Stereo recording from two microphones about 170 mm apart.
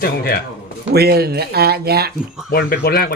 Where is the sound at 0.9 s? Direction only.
70° right (ahead or behind).